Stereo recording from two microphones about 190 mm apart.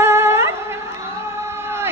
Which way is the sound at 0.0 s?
15° right (ahead or behind).